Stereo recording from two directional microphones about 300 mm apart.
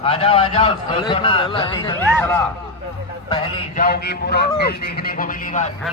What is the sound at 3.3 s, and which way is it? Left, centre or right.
Speech, left.